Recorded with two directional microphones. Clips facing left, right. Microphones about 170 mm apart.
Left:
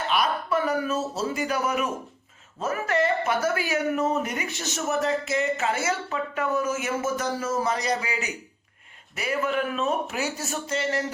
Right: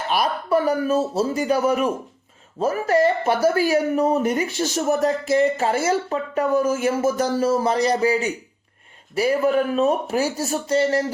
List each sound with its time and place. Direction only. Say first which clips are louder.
0.1 s speech: right 5 dB; 35° right (ahead or behind)